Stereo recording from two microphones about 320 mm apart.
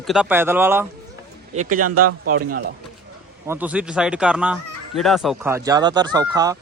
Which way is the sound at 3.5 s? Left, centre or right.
Centre.